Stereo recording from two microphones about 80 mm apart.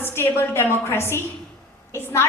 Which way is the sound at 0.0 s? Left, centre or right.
Left.